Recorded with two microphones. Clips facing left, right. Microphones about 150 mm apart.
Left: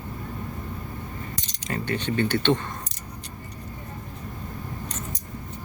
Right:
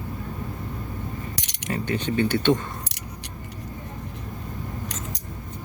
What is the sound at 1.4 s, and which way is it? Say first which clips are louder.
Keys jangling: right 3 dB; 75° right (ahead or behind).